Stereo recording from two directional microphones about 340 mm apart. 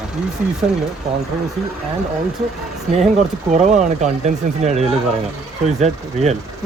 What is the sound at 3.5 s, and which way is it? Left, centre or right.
Speech, right.